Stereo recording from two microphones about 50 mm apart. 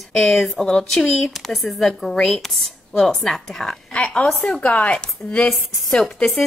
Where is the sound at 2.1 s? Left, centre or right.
Centre.